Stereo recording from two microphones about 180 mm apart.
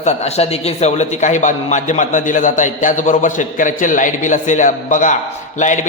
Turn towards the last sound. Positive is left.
turn(degrees=45)  # may be behind; listen again after turning